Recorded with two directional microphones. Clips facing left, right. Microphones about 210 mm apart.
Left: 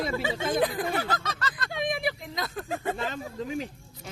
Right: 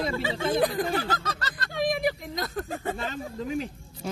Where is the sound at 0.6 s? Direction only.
35° right (ahead or behind).